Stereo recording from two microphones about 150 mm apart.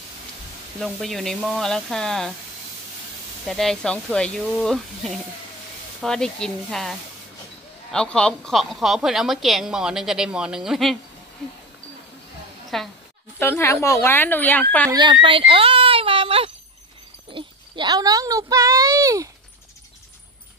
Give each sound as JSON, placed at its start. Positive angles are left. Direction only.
{"t": 0.7, "sound": "a woman's voice", "side_deg": 0}
{"t": 3.4, "sound": "a woman's voice", "side_deg": 0}
{"t": 12.7, "sound": "a woman's voice", "side_deg": 0}
{"t": 13.4, "sound": "speech", "side_deg": 15}
{"t": 14.9, "sound": "speech", "side_deg": -30}
{"t": 15.2, "sound": "a sound", "side_deg": -35}
{"t": 17.3, "sound": "a child's voice", "side_deg": -35}